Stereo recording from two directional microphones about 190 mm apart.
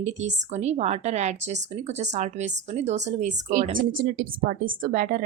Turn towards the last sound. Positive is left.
turn(degrees=-45)  # may be behind; listen again after turning